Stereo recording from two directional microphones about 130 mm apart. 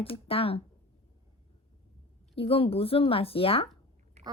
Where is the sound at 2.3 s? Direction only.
45° left (ahead or behind).